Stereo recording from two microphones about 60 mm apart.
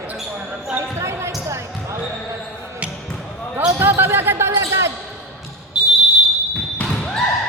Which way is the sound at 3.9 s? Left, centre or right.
Right.